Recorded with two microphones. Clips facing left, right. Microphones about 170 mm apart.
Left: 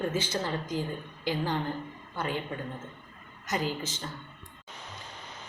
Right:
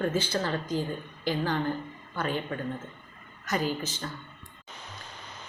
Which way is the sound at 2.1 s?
20° left (ahead or behind).